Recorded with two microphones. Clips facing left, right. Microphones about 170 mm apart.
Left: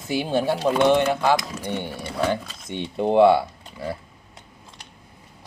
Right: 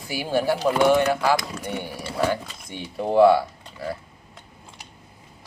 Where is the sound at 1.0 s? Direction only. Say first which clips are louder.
Left 1 dB; 25° left (ahead or behind).